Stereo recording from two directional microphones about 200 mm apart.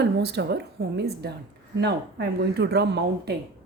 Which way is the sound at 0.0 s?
55° right (ahead or behind).